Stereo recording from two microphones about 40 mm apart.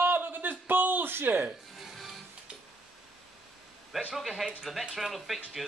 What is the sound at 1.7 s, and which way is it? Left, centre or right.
Music, centre.